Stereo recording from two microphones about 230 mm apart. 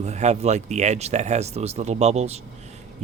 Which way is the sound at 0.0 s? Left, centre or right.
Right.